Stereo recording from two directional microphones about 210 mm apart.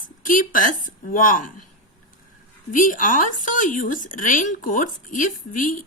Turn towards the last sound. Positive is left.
turn(degrees=40)  # may be behind; listen again after turning